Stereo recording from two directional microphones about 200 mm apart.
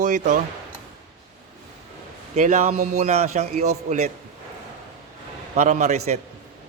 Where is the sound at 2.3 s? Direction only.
35° right (ahead or behind).